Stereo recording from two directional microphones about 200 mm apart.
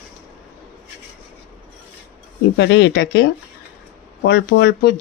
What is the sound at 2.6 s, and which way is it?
Speech, 60° left (ahead or behind).